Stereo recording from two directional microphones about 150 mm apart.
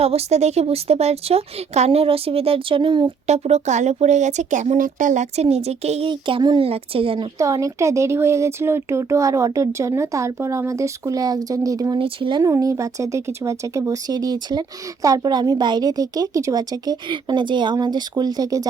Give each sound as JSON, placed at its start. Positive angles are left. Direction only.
{"t": 0.0, "sound": "speech", "side_deg": -45}
{"t": 3.2, "sound": "speech", "side_deg": -45}
{"t": 6.1, "sound": "speech", "side_deg": -35}
{"t": 7.3, "sound": "speech", "side_deg": -20}
{"t": 11.9, "sound": "speech", "side_deg": -35}
{"t": 12.4, "sound": "speech", "side_deg": -20}